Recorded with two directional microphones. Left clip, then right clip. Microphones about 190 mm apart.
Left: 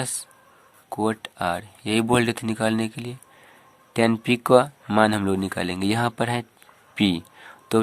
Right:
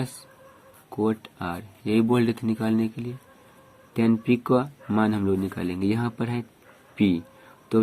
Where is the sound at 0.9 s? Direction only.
50° left (ahead or behind).